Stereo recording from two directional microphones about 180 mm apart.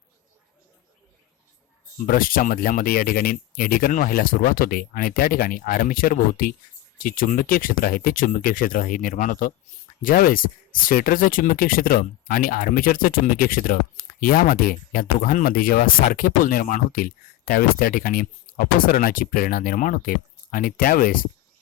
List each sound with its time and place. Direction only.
2.0 s speech: 50° left (ahead or behind)